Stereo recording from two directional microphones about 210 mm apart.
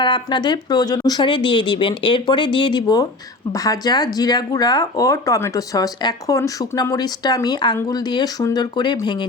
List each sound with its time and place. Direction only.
0.0 s speech: 20° left (ahead or behind)